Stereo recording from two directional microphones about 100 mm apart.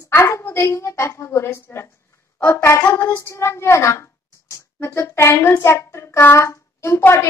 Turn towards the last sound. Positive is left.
turn(degrees=25)  # may be behind; listen again after turning